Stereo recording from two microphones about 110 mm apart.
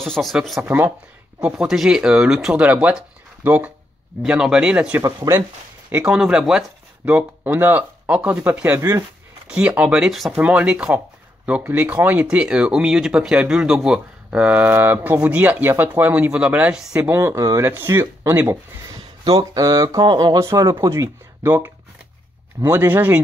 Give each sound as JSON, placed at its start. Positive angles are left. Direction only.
{"t": 0.0, "sound": "speech", "side_deg": 0}
{"t": 0.7, "sound": "speech", "side_deg": -20}
{"t": 1.4, "sound": "speech", "side_deg": -5}
{"t": 2.6, "sound": "speech", "side_deg": -15}
{"t": 5.0, "sound": "speech", "side_deg": -30}
{"t": 5.9, "sound": "speech", "side_deg": -15}
{"t": 17.1, "sound": "speech", "side_deg": -25}
{"t": 20.5, "sound": "speech", "side_deg": -30}